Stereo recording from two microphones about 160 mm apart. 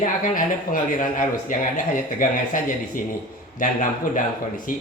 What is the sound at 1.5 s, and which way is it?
Mantra, 55° left (ahead or behind).